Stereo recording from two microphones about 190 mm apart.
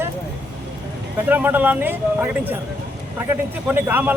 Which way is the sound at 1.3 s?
10° right (ahead or behind).